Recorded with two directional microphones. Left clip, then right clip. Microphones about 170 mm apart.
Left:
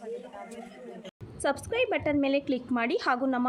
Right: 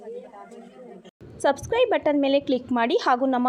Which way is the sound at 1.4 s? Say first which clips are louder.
Right 7 dB; 20° right (ahead or behind).